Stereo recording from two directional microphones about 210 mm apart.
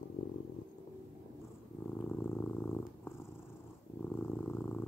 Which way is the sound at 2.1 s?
10° left (ahead or behind).